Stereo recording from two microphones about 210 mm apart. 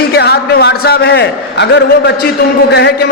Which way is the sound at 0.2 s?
50° left (ahead or behind).